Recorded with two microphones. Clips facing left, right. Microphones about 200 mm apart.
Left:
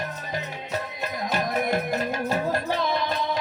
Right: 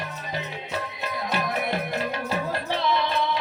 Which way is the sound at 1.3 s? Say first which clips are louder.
Left 2 dB; 45° left (ahead or behind).